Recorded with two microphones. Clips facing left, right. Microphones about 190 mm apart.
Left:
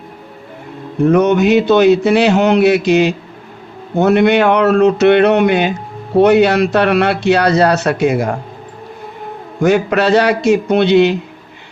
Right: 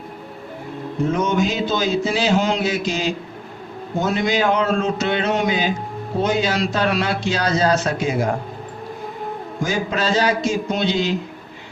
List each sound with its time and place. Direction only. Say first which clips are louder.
1.0 s a man's voice: left 9 dB; 65° left (ahead or behind)
9.6 s a man's voice: left 10 dB; 65° left (ahead or behind)